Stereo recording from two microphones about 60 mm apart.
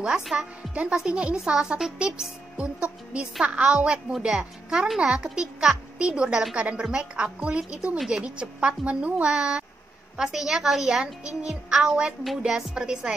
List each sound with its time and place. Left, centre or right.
0.2 s a woman's voice: centre
0.7 s a woman's voice: centre
4.1 s a woman's voice: centre